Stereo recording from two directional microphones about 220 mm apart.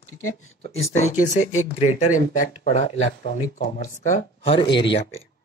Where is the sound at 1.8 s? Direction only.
30° left (ahead or behind).